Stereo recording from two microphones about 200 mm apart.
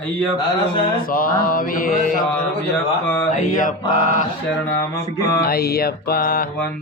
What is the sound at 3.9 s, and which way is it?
Speech, 40° left (ahead or behind).